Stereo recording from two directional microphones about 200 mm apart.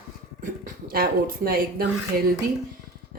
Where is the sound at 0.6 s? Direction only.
45° right (ahead or behind).